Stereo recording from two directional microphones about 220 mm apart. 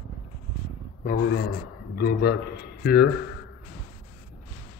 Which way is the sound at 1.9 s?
45° left (ahead or behind).